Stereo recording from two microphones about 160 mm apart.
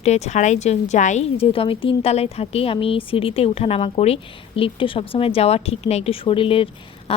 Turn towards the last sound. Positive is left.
turn(degrees=35)  # may be behind; listen again after turning